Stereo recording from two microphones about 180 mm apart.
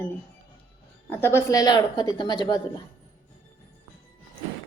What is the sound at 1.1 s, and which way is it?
A woman's voice, 15° left (ahead or behind).